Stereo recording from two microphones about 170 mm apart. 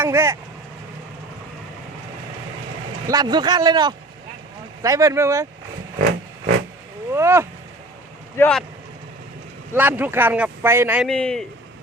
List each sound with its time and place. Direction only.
0.0 s speech: 15° right (ahead or behind)
3.1 s a man's voice: 25° right (ahead or behind)
7.1 s speech: 15° right (ahead or behind)
8.4 s speech: 5° left (ahead or behind)
9.7 s speech: 10° right (ahead or behind)
11.1 s a man's voice: 5° left (ahead or behind)